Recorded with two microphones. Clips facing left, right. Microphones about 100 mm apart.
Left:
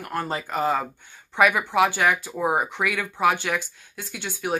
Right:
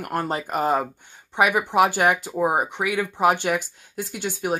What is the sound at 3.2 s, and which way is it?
Speech, 35° right (ahead or behind).